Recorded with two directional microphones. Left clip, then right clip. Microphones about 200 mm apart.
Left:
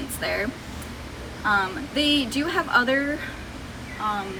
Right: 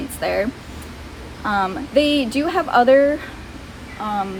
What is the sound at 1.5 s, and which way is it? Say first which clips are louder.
Speech: right 2 dB; 55° right (ahead or behind).